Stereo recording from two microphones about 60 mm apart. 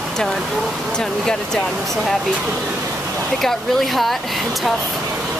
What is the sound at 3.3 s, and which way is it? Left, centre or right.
Speech, centre.